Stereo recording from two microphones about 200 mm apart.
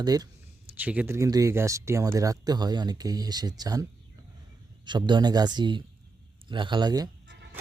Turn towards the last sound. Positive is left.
turn(degrees=-20)  # may be behind; listen again after turning